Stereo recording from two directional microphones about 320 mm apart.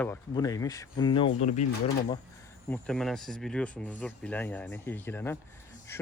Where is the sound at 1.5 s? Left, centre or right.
Left.